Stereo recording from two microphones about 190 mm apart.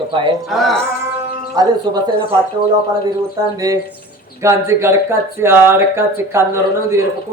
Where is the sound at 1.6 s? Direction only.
20° right (ahead or behind).